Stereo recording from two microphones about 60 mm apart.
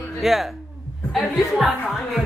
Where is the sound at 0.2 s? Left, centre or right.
Centre.